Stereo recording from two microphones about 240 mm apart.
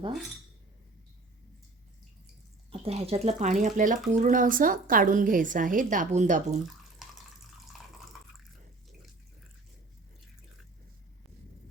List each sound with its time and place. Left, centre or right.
2.8 s speech: right
7.7 s water: centre